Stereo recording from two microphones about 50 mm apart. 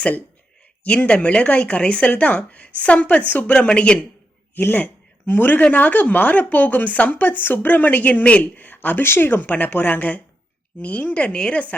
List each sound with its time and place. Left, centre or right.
0.9 s a woman's voice: left
2.0 s a woman's voice: left
4.5 s a man's voice: left
9.5 s a woman's voice: left